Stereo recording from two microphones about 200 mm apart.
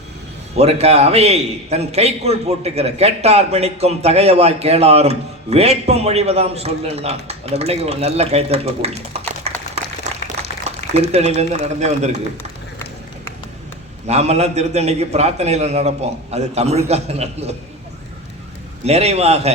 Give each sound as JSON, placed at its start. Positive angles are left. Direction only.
{"t": 0.5, "sound": "a man's voice", "side_deg": -30}
{"t": 9.5, "sound": "applause", "side_deg": -35}
{"t": 10.3, "sound": "a sound", "side_deg": -60}
{"t": 11.1, "sound": "a man's voice", "side_deg": -30}
{"t": 14.1, "sound": "a man's voice", "side_deg": -35}
{"t": 18.9, "sound": "a man's voice", "side_deg": -30}